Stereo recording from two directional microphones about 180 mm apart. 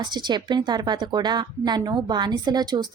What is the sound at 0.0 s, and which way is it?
A woman's voice, 25° right (ahead or behind).